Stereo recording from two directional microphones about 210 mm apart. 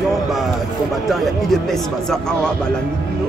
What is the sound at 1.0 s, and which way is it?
Speech, centre (ahead or behind).